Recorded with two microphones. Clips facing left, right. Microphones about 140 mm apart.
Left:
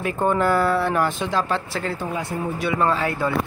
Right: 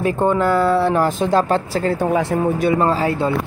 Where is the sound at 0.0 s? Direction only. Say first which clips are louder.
Right 5 dB; 30° right (ahead or behind).